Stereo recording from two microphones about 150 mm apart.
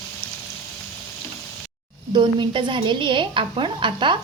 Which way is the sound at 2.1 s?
35° right (ahead or behind).